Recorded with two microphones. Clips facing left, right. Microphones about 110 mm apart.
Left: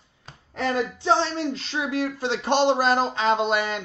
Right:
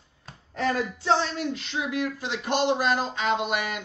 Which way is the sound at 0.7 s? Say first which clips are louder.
Left 4 dB; 25° left (ahead or behind).